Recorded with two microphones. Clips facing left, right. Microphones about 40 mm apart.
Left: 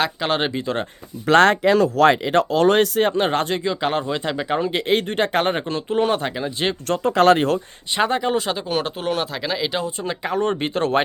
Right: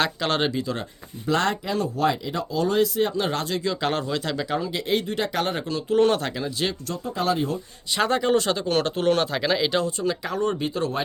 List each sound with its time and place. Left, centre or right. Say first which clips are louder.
0.0 s speech: left 2 dB; centre
0.6 s speech: left 5 dB; left
1.3 s speech: left 9 dB; left
3.6 s speech: left 3 dB; centre
4.7 s speech: left 4 dB; left
6.0 s speech: even; centre
7.0 s speech: left 10 dB; left
7.9 s speech: left 1 dB; centre
9.8 s speech: even; left
10.4 s speech: left 2 dB; left